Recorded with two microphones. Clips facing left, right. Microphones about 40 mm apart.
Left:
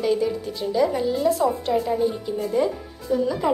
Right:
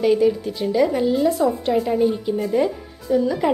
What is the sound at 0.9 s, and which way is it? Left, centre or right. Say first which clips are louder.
Speech: right 4 dB; right.